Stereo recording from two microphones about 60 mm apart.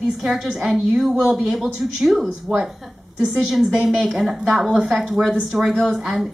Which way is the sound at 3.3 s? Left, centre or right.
Centre.